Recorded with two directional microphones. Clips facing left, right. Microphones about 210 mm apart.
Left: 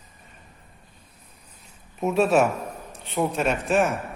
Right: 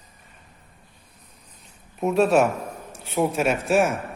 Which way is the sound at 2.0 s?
Centre (ahead or behind).